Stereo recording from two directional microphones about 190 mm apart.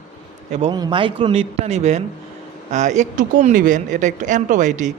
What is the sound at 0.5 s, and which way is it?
A woman's voice, 25° right (ahead or behind).